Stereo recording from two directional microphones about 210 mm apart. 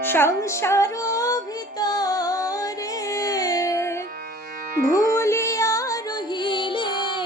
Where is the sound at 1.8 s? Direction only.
20° left (ahead or behind).